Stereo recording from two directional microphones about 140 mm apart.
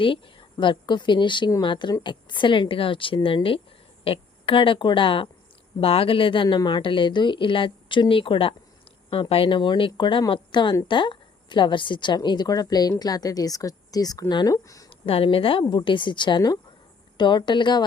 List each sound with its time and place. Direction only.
0.0 s a woman's voice: 35° left (ahead or behind)
14.8 s a woman's voice: 40° left (ahead or behind)